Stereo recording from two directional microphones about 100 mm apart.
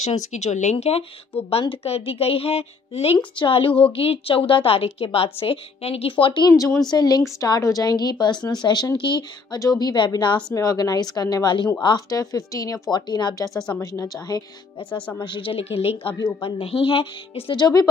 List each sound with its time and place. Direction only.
0.4 s speech: 90° left
1.5 s speech: 70° left (ahead or behind)
3.3 s a woman's voice: 65° left (ahead or behind)
6.5 s speech: 30° left (ahead or behind)
6.9 s a woman's voice: 45° left (ahead or behind)
9.6 s a woman's voice: 40° left (ahead or behind)
10.5 s speech: 35° left (ahead or behind)
12.9 s a woman's voice: 45° left (ahead or behind)
14.9 s speech: 15° left (ahead or behind)
15.1 s a woman's voice: 55° left (ahead or behind)